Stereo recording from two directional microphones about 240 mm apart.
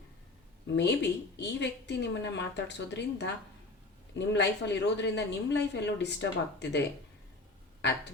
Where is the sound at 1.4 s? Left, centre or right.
Left.